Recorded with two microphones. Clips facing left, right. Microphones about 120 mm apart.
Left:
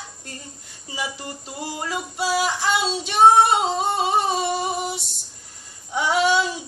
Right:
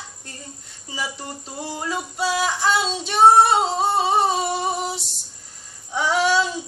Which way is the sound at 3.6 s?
5° left (ahead or behind).